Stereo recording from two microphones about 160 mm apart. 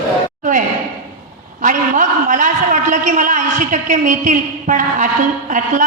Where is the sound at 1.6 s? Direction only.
50° right (ahead or behind).